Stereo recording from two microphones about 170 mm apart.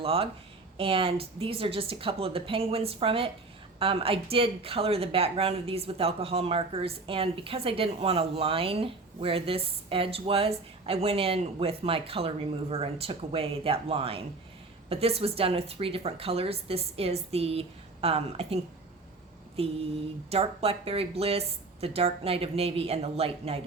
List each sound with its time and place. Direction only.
0.0 s speech: 35° right (ahead or behind)